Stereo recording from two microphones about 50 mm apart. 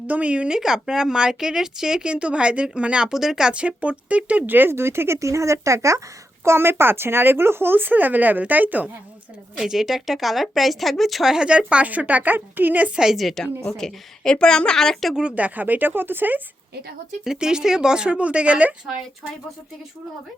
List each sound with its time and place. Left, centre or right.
0.1 s a woman's voice: right; by 3.5 s centre
3.5 s a woman's voice: right
4.4 s a woman's voice: right
4.7 s speech: right
6.4 s speech: right
9.6 s speech: centre
11.4 s a woman's voice: right
13.1 s speech: centre
13.7 s a woman's voice: centre
15.4 s a woman's voice: right
17.3 s a woman's voice: centre